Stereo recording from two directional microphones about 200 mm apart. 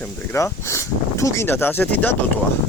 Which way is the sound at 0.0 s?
15° left (ahead or behind).